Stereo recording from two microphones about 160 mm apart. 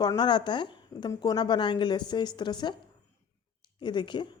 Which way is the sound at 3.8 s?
30° left (ahead or behind).